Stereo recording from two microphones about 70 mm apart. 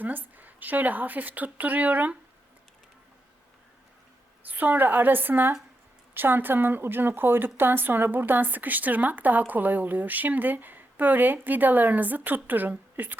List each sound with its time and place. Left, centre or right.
0.0 s a woman's voice: right
4.4 s a woman's voice: right